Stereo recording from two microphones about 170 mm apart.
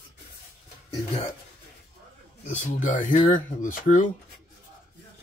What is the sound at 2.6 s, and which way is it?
Speech, 50° left (ahead or behind).